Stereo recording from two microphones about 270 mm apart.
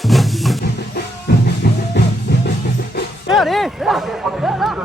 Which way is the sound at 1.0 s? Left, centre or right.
Left.